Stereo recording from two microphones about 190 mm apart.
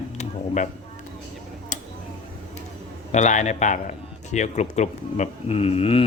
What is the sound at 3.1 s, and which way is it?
Speech, 40° left (ahead or behind).